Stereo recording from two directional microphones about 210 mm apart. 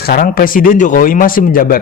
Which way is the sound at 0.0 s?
45° left (ahead or behind).